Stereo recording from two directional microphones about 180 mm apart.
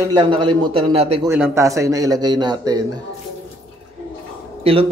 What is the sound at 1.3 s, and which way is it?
A man's voice, 15° right (ahead or behind).